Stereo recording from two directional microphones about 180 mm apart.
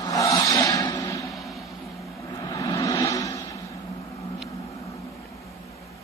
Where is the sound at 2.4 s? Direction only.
15° left (ahead or behind).